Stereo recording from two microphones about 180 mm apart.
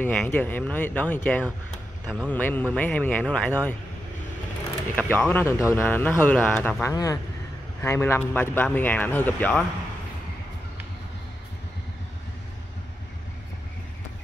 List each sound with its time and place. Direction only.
0.0 s speech: 5° left (ahead or behind)
4.9 s speech: 10° left (ahead or behind)